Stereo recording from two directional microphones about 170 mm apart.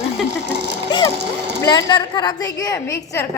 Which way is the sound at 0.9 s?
25° left (ahead or behind).